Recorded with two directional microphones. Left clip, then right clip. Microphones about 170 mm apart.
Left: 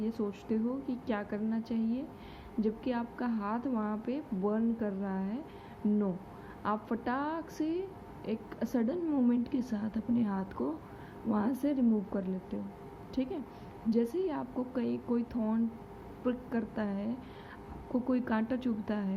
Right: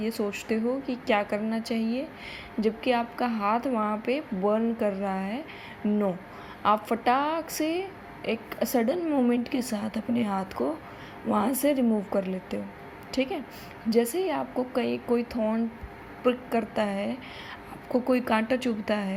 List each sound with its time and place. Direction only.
0.0 s a woman's voice: 15° right (ahead or behind)
6.6 s a woman's voice: 15° right (ahead or behind)